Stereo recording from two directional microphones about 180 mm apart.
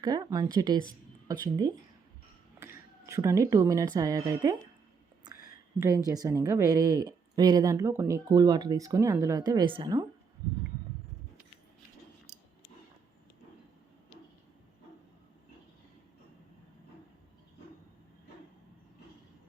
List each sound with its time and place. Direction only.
0.0 s a woman's voice: 20° right (ahead or behind)
2.6 s a sound: 15° right (ahead or behind)
3.9 s a woman's voice: 20° right (ahead or behind)